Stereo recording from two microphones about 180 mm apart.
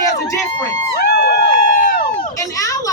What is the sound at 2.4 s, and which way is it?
Speech, 15° left (ahead or behind).